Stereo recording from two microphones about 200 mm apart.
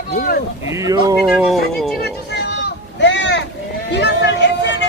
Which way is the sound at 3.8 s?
60° left (ahead or behind).